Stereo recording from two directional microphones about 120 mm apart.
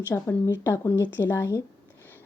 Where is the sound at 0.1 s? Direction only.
20° left (ahead or behind).